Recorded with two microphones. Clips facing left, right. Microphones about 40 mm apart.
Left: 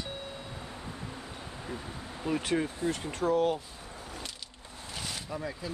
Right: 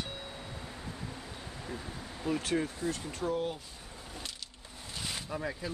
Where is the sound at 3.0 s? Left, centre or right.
Left.